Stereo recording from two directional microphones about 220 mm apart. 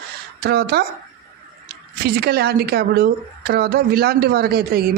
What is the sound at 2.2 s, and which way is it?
A woman's voice, 45° right (ahead or behind).